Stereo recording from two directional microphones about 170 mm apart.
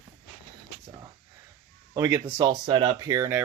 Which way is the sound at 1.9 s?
15° right (ahead or behind).